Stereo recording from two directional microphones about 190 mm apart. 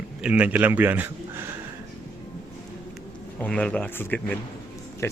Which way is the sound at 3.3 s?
5° left (ahead or behind).